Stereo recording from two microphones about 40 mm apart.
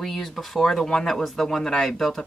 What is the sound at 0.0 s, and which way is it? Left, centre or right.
Speech, centre.